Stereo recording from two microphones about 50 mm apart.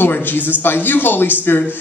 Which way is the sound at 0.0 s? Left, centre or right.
Left.